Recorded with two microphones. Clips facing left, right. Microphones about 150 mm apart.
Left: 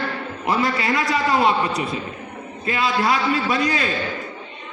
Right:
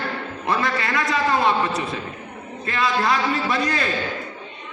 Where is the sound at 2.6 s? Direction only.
20° left (ahead or behind).